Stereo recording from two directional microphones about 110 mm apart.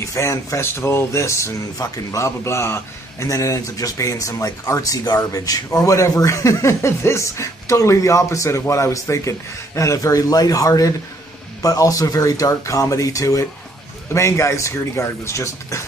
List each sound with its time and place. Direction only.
0.0 s speech: 30° left (ahead or behind)